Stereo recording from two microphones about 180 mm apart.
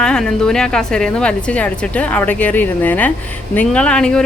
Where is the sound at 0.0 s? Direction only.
5° left (ahead or behind).